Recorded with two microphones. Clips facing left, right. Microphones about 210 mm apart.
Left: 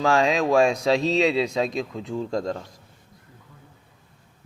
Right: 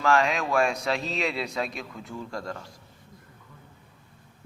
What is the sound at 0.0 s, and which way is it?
Speech, 25° left (ahead or behind).